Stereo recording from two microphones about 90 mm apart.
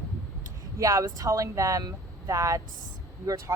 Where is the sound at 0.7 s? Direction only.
35° right (ahead or behind).